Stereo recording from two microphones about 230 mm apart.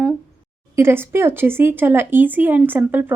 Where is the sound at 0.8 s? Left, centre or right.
Centre.